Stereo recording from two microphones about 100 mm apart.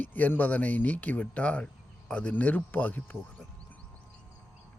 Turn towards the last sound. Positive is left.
turn(degrees=15)  # may be behind; listen again after turning